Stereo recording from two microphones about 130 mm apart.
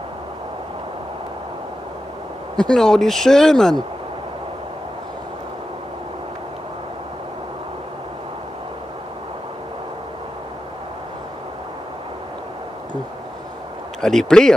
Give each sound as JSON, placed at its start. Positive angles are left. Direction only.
{"t": 2.5, "sound": "speech", "side_deg": 5}
{"t": 14.0, "sound": "speech", "side_deg": 5}